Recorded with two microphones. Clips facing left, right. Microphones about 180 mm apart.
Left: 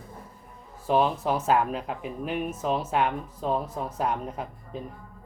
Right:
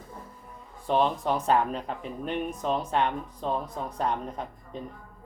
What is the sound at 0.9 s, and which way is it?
Speech, 5° left (ahead or behind).